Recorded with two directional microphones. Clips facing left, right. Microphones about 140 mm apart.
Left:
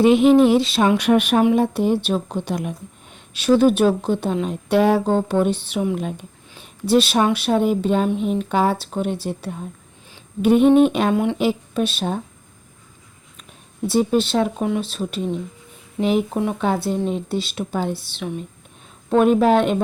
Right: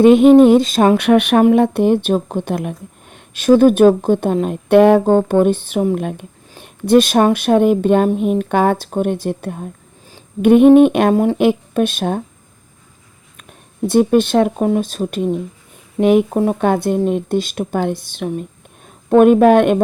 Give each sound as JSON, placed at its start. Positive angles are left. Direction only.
{"t": 0.0, "sound": "speech", "side_deg": -50}
{"t": 0.9, "sound": "speech", "side_deg": -65}
{"t": 8.0, "sound": "speech", "side_deg": -45}
{"t": 11.1, "sound": "speech", "side_deg": -40}
{"t": 11.3, "sound": "speech", "side_deg": -55}
{"t": 13.8, "sound": "speech", "side_deg": -55}
{"t": 16.0, "sound": "speech", "side_deg": -55}
{"t": 16.4, "sound": "speech", "side_deg": -40}
{"t": 16.6, "sound": "speech", "side_deg": -55}